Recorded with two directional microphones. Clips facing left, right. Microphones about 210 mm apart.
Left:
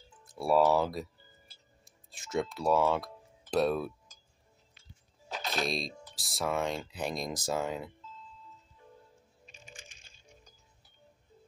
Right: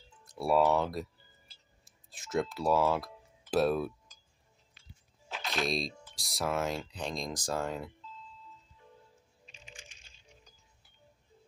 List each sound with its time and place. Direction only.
0.2 s speech: centre (ahead or behind)
5.3 s a sound: 40° left (ahead or behind)
5.7 s speech: centre (ahead or behind)
9.7 s music: 45° left (ahead or behind)